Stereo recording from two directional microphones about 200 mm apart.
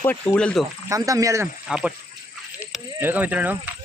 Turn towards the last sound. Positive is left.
turn(degrees=-10)  # may be behind; listen again after turning